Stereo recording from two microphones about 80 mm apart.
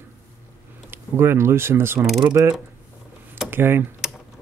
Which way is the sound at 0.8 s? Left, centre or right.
Right.